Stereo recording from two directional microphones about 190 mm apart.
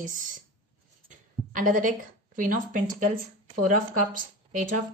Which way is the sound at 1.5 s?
45° right (ahead or behind).